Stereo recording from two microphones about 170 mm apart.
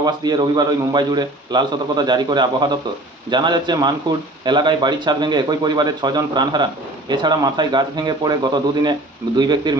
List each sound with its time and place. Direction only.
0.0 s a man's voice: 25° right (ahead or behind)